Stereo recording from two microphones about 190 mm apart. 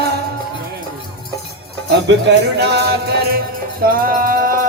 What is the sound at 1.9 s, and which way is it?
Music, 60° right (ahead or behind).